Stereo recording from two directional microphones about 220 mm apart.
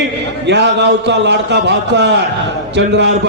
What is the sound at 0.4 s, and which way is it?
A man's voice, 50° right (ahead or behind).